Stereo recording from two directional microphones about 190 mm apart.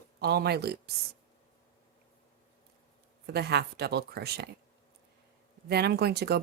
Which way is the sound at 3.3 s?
60° right (ahead or behind).